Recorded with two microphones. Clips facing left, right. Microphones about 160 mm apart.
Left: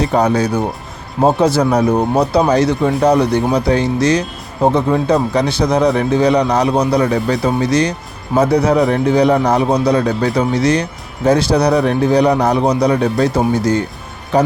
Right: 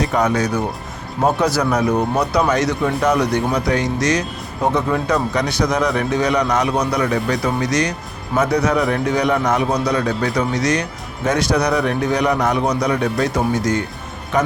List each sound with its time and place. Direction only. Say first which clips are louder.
0.0 s speech: left 4 dB; 30° left (ahead or behind)